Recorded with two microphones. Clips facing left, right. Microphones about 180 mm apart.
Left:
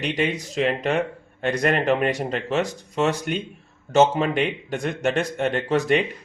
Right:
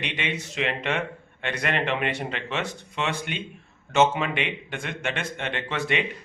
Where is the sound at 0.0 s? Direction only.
40° left (ahead or behind).